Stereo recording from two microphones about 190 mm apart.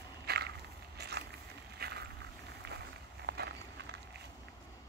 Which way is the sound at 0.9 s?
60° right (ahead or behind).